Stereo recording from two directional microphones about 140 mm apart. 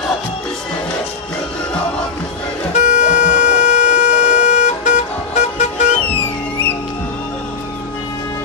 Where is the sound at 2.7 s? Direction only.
60° left (ahead or behind).